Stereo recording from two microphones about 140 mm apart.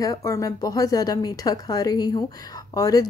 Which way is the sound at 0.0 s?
25° left (ahead or behind).